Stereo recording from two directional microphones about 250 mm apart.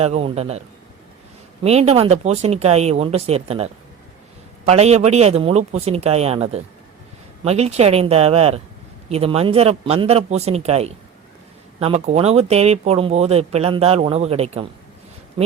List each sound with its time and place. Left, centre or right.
0.0 s speech: right
1.6 s speech: right